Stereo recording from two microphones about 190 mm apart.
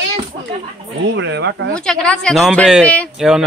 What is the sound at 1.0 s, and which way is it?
Speech, 70° right (ahead or behind).